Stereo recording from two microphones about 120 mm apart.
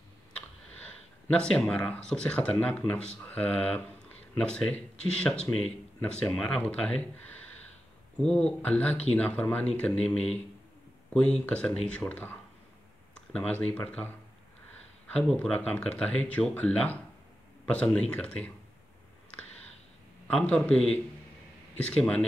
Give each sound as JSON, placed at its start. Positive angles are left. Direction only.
{"t": 1.3, "sound": "speech", "side_deg": 10}
{"t": 11.1, "sound": "speech", "side_deg": 10}
{"t": 13.1, "sound": "clicking", "side_deg": 10}
{"t": 13.7, "sound": "speech", "side_deg": 10}
{"t": 15.1, "sound": "speech", "side_deg": 10}
{"t": 20.2, "sound": "speech", "side_deg": 10}